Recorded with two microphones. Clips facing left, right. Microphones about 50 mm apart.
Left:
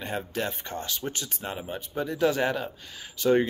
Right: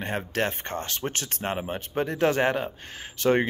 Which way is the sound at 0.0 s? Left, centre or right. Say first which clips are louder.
Right 3 dB; right.